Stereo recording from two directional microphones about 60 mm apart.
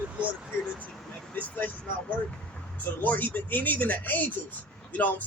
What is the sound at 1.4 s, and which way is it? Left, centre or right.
A man's voice, left.